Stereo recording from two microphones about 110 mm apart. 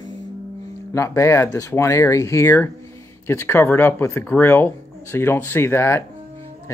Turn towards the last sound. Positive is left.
turn(degrees=20)  # may be behind; listen again after turning